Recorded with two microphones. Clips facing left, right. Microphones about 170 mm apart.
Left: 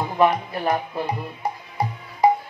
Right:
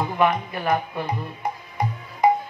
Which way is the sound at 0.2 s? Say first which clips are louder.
Left 2 dB; 35° left (ahead or behind).